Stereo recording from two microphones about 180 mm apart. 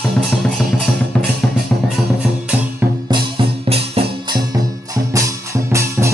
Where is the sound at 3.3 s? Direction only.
35° right (ahead or behind).